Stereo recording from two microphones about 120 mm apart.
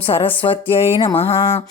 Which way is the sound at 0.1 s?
50° left (ahead or behind).